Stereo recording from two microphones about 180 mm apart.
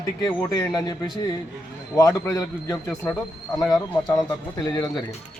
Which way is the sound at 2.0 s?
15° left (ahead or behind).